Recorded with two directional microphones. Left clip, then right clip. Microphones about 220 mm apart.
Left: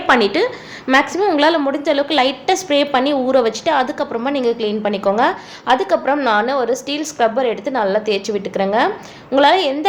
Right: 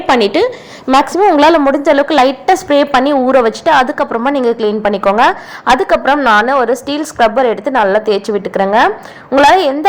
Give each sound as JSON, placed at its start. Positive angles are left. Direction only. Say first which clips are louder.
{"t": 0.1, "sound": "a woman's voice", "louder": "right 4 dB", "side_deg": -20}